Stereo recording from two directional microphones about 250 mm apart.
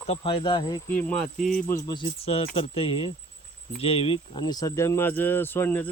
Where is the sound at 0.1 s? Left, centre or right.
Left.